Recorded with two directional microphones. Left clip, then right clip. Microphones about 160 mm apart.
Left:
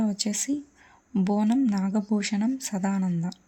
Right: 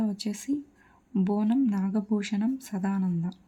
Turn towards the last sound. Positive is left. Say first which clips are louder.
# left 2 dB
turn(degrees=10)  # may be behind; listen again after turning